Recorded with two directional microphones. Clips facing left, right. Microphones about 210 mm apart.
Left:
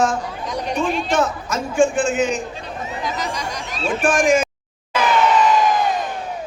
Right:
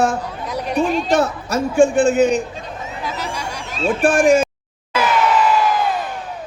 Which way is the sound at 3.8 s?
35° right (ahead or behind).